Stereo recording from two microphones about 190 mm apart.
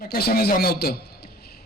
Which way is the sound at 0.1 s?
55° left (ahead or behind).